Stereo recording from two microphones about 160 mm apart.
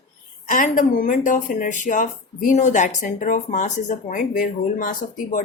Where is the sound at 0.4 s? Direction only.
55° left (ahead or behind).